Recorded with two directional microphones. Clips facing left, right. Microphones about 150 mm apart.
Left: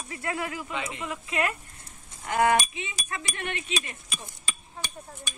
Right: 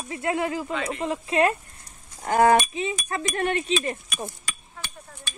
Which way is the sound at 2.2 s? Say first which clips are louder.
Right 5 dB; 35° right (ahead or behind).